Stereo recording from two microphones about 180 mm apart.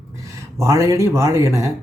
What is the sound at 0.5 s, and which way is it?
Speech, 15° right (ahead or behind).